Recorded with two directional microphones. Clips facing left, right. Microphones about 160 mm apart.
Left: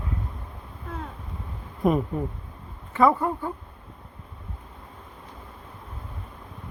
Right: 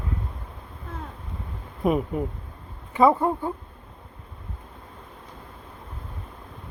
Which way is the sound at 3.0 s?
20° right (ahead or behind).